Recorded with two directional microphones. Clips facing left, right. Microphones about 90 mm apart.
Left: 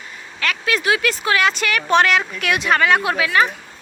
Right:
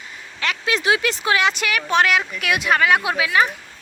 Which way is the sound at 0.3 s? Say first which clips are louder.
Left 1 dB; 20° right (ahead or behind).